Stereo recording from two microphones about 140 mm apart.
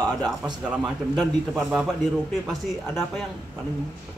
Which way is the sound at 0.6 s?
10° right (ahead or behind).